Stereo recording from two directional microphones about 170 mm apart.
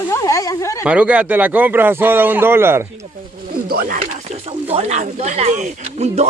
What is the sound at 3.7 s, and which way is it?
Speech, 55° right (ahead or behind).